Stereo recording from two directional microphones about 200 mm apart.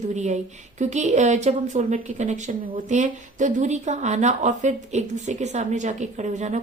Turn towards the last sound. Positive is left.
turn(degrees=-35)  # may be behind; listen again after turning